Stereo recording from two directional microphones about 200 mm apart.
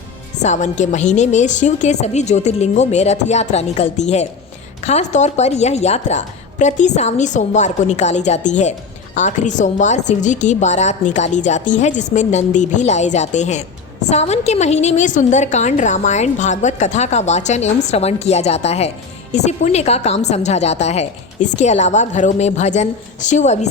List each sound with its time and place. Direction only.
0.4 s a woman's voice: 35° left (ahead or behind)